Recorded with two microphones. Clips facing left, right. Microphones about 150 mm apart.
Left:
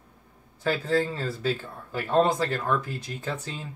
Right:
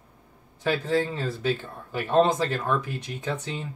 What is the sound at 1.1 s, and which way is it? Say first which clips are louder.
Speech: right 1 dB; 15° right (ahead or behind).